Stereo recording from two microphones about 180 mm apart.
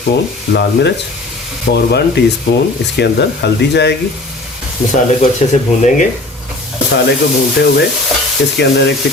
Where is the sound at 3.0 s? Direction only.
65° left (ahead or behind).